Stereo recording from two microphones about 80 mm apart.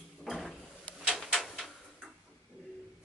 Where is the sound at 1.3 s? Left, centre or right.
Centre.